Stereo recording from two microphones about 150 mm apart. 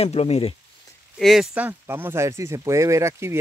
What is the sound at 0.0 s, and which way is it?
Speech, 45° left (ahead or behind).